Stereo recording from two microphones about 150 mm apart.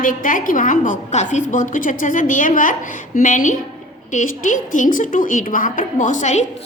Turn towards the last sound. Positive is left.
turn(degrees=55)  # may be behind; listen again after turning